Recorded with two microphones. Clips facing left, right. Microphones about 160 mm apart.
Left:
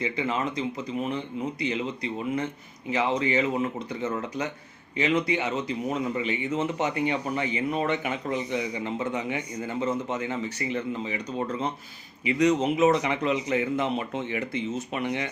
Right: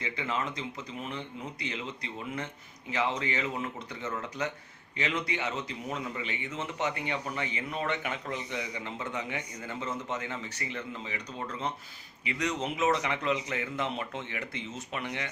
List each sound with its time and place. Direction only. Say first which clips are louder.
0.0 s speech: left 6 dB; 15° left (ahead or behind)
2.9 s speech: left 6 dB; 15° left (ahead or behind)
6.5 s speech: left 9 dB; 45° left (ahead or behind)
7.0 s speech: left 7 dB; 15° left (ahead or behind)